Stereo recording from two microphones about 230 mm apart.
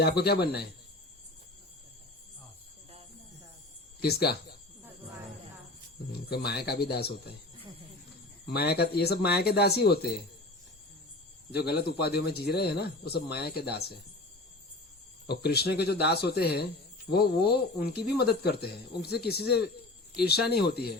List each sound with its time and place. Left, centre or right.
0.0 s speech: left
4.0 s speech: left
6.1 s speech: left
8.4 s speech: left
11.5 s speech: left
15.3 s speech: left